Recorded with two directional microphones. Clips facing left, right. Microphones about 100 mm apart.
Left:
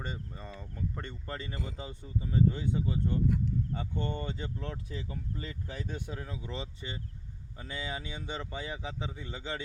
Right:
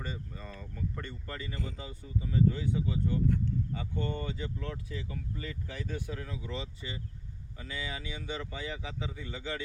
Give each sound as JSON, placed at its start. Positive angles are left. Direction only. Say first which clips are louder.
{"t": 0.0, "sound": "speech", "louder": "even", "side_deg": 25}